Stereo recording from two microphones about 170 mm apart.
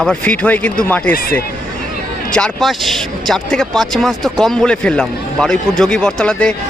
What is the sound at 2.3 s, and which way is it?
A man's voice, 5° left (ahead or behind).